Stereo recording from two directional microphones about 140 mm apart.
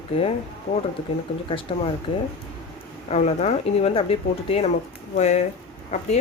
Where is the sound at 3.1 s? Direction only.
55° left (ahead or behind).